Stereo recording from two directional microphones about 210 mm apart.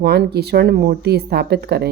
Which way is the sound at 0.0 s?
50° right (ahead or behind).